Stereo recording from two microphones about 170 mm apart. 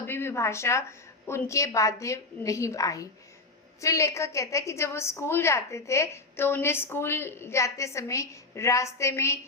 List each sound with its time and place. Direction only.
0.0 s a woman's voice: 15° left (ahead or behind)